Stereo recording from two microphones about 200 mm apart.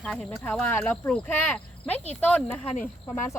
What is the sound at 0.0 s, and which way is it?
Speech, 5° left (ahead or behind).